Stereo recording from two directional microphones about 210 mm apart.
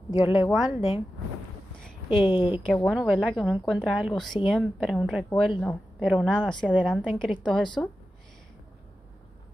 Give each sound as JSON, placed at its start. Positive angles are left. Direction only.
{"t": 0.2, "sound": "a woman's voice", "side_deg": -5}
{"t": 0.7, "sound": "a woman's voice", "side_deg": 30}
{"t": 2.0, "sound": "a woman's voice", "side_deg": 25}
{"t": 2.6, "sound": "a woman's voice", "side_deg": 5}